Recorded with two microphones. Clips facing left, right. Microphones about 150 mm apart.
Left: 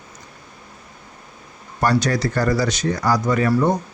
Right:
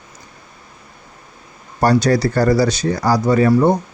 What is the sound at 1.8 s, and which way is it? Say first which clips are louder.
Speech: right 5 dB; 35° right (ahead or behind).